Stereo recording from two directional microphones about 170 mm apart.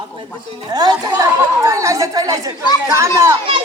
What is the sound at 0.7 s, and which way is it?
A woman's voice, 25° right (ahead or behind).